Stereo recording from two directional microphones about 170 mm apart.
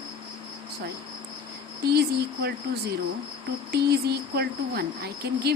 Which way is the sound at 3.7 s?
70° right (ahead or behind).